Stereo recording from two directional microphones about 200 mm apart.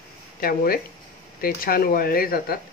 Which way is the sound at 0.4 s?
45° left (ahead or behind).